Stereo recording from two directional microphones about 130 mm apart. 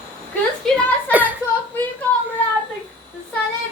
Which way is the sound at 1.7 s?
10° left (ahead or behind).